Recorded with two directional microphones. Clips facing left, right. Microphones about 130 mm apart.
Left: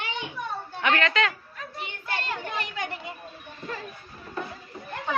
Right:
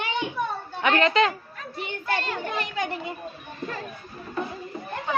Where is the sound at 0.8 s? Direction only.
30° right (ahead or behind).